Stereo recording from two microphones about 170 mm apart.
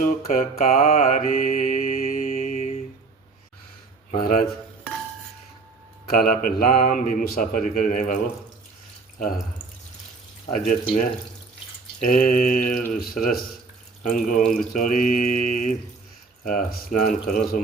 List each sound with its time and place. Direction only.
0.0 s mantra: 55° left (ahead or behind)
2.4 s mantra: 40° left (ahead or behind)
4.1 s speech: 60° left (ahead or behind)
6.1 s speech: 60° left (ahead or behind)
10.7 s mantra: 50° left (ahead or behind)